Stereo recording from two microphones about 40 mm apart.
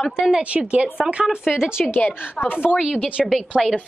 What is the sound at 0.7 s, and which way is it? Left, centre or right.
Speech, right.